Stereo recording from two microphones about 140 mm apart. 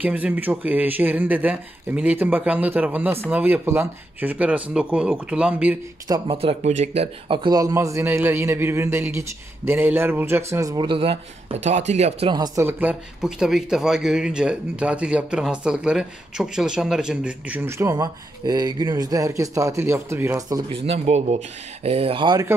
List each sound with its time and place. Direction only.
0.0 s speech: 10° right (ahead or behind)
6.0 s speech: 30° right (ahead or behind)
6.3 s speech: 45° right (ahead or behind)
12.5 s speech: 15° right (ahead or behind)
13.2 s speech: 5° right (ahead or behind); by 20.6 s 25° right (ahead or behind)
20.7 s speech: 45° right (ahead or behind)